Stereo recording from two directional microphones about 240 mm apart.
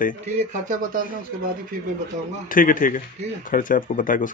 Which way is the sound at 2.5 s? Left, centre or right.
Left.